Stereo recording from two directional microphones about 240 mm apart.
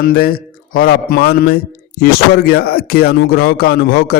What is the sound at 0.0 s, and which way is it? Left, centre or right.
A man's voice, left.